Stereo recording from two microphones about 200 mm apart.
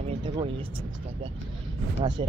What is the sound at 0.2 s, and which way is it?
Vehicle, 25° right (ahead or behind).